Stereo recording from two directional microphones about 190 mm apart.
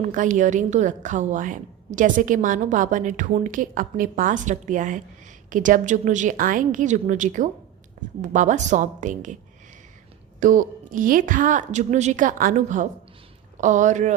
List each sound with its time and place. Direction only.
0.0 s a woman's voice: 40° right (ahead or behind)
10.4 s a woman's voice: 45° right (ahead or behind)